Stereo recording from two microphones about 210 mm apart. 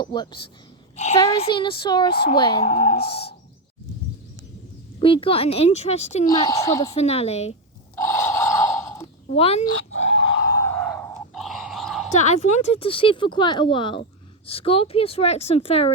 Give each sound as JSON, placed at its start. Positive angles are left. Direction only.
{"t": 0.0, "sound": "speech", "side_deg": 20}
{"t": 0.9, "sound": "a child's voice", "side_deg": 35}
{"t": 4.9, "sound": "speech", "side_deg": 25}
{"t": 6.3, "sound": "a woman's voice", "side_deg": 20}
{"t": 6.9, "sound": "speech", "side_deg": 30}
{"t": 7.9, "sound": "gasp", "side_deg": 10}
{"t": 9.3, "sound": "speech", "side_deg": 30}
{"t": 10.0, "sound": "a sound", "side_deg": 30}
{"t": 10.6, "sound": "a sound", "side_deg": 10}
{"t": 12.1, "sound": "speech", "side_deg": 35}